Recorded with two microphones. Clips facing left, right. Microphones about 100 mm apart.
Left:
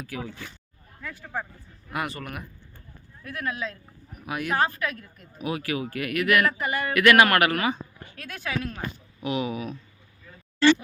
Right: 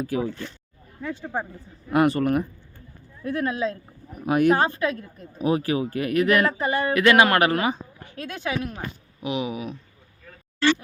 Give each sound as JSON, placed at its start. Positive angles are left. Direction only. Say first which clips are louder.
{"t": 0.0, "sound": "speech", "louder": "right 9 dB", "side_deg": -30}
{"t": 1.9, "sound": "speech", "louder": "right 12 dB", "side_deg": -45}